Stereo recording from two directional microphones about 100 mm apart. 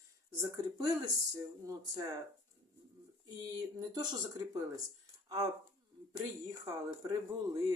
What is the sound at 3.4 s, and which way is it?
Speech, 40° right (ahead or behind).